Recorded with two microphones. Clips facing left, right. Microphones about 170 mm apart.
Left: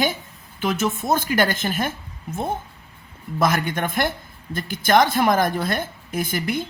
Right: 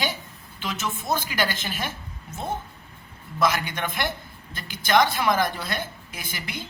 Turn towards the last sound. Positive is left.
turn(degrees=50)  # may be behind; listen again after turning